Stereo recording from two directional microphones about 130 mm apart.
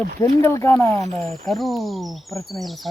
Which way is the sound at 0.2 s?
20° left (ahead or behind).